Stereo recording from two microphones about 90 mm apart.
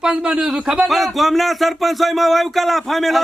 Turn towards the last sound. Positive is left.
turn(degrees=0)  # may be behind; listen again after turning